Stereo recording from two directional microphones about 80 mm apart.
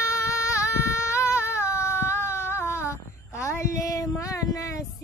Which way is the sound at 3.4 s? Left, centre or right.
Left.